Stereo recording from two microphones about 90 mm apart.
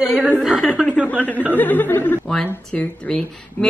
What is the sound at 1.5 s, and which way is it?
Speech, 20° left (ahead or behind).